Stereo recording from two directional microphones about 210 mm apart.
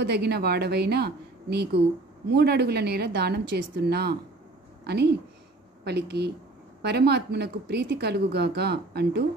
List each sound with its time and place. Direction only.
0.0 s a woman's voice: 50° right (ahead or behind)